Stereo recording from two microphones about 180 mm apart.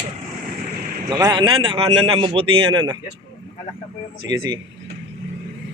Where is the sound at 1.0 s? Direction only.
20° right (ahead or behind).